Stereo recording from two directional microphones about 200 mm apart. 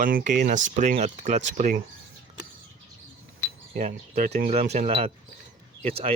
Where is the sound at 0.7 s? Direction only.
40° right (ahead or behind).